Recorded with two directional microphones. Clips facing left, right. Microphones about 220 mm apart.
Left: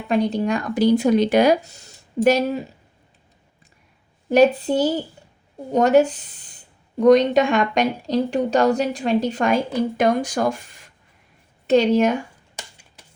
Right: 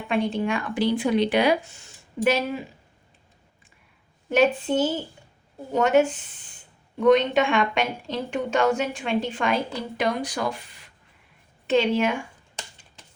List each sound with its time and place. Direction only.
0.1 s a woman's voice: 40° left (ahead or behind)
4.3 s a woman's voice: 40° left (ahead or behind)
12.5 s a sound: 10° left (ahead or behind)